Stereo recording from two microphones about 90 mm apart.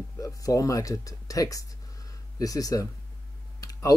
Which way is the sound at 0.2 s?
40° left (ahead or behind).